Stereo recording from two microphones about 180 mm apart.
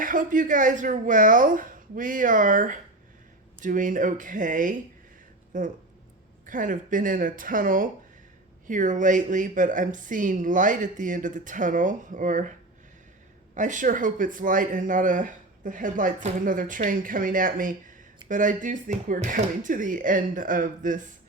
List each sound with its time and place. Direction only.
0.0 s speech: 45° right (ahead or behind)